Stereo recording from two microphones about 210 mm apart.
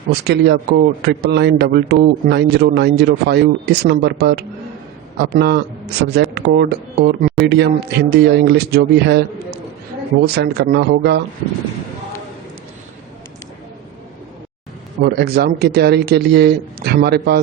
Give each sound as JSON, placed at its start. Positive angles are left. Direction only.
{"t": 0.1, "sound": "a man's voice", "side_deg": -50}
{"t": 10.2, "sound": "a man's voice", "side_deg": -50}
{"t": 15.0, "sound": "a man's voice", "side_deg": -50}